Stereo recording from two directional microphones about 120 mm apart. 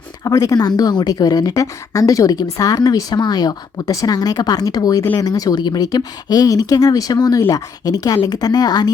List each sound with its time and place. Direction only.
0.3 s a woman's voice: 30° left (ahead or behind)